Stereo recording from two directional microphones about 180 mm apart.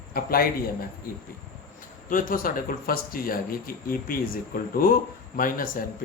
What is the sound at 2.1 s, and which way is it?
Speech, 50° left (ahead or behind).